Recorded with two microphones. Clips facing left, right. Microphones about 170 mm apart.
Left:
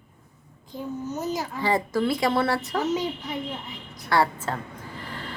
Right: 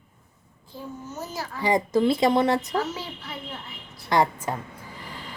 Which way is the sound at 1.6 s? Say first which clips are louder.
Right 3 dB; 20° right (ahead or behind).